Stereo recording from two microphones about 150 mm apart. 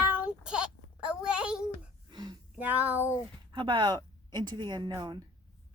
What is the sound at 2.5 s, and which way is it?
Speech, 10° right (ahead or behind).